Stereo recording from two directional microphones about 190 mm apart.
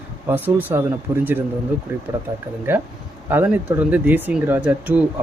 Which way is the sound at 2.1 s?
20° right (ahead or behind).